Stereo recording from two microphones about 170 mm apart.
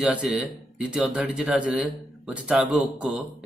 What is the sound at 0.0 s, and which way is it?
A man's voice, 5° right (ahead or behind).